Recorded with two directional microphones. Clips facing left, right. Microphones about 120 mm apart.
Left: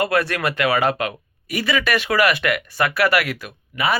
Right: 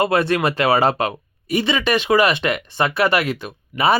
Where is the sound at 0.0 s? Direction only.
25° right (ahead or behind).